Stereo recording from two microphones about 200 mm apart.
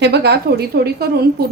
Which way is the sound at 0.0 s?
55° right (ahead or behind).